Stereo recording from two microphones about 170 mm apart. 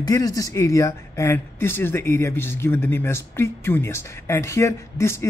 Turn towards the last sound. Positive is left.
turn(degrees=15)  # may be behind; listen again after turning